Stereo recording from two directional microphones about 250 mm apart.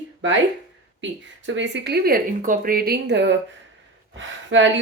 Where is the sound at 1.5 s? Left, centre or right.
Right.